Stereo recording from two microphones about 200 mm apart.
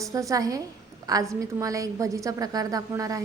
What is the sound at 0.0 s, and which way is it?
A woman's voice, 15° right (ahead or behind).